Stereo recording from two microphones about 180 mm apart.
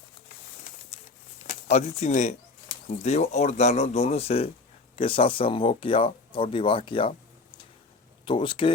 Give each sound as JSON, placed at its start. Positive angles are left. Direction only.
{"t": 1.5, "sound": "speech", "side_deg": 40}
{"t": 8.2, "sound": "speech", "side_deg": 30}